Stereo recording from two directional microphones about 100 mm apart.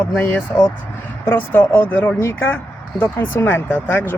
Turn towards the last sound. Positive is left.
turn(degrees=20)  # may be behind; listen again after turning